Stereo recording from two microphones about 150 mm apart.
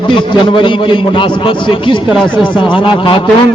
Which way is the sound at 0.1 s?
35° left (ahead or behind).